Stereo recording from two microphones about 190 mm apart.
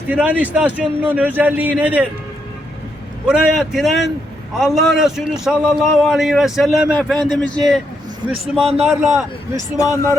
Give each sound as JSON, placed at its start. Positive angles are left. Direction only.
{"t": 0.1, "sound": "a man's voice", "side_deg": -10}
{"t": 3.2, "sound": "a man's voice", "side_deg": -5}
{"t": 9.7, "sound": "speech", "side_deg": 15}